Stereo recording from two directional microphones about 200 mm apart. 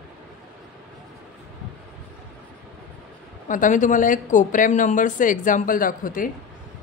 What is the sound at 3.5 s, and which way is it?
Speech, 40° left (ahead or behind).